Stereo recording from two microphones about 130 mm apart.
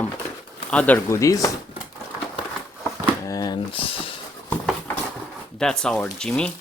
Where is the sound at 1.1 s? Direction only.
25° left (ahead or behind).